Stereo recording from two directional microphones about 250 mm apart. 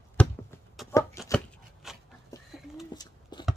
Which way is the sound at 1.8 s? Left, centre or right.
Centre.